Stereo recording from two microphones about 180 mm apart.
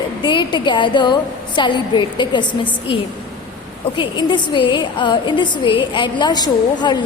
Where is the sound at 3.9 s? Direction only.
25° left (ahead or behind).